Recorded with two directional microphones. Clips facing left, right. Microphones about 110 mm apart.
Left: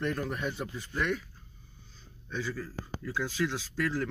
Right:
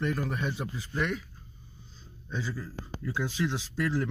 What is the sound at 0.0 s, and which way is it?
Speech, 5° right (ahead or behind).